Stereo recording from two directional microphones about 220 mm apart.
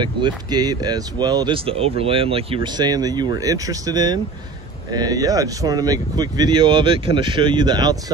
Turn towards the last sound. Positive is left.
turn(degrees=-20)  # may be behind; listen again after turning